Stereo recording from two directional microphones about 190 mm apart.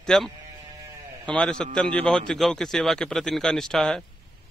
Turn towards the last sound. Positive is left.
turn(degrees=0)  # may be behind; listen again after turning